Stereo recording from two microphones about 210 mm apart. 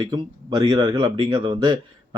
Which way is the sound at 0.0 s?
20° right (ahead or behind).